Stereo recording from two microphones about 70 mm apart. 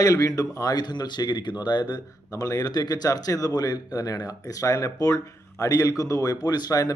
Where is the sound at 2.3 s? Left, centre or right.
Left.